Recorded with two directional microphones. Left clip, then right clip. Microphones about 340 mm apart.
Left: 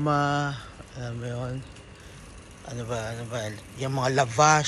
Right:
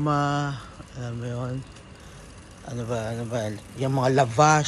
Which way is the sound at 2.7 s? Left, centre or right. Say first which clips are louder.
Right 2 dB; centre.